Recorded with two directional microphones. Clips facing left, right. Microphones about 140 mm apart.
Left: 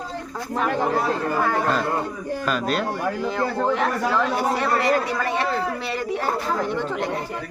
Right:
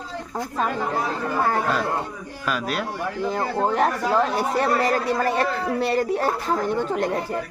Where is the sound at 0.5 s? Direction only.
70° left (ahead or behind).